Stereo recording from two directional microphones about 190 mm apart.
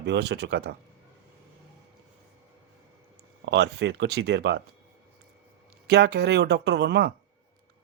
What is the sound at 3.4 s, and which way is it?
Speech, 65° right (ahead or behind).